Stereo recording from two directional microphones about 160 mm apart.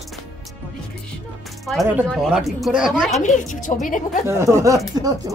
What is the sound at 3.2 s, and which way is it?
Speech, 55° left (ahead or behind).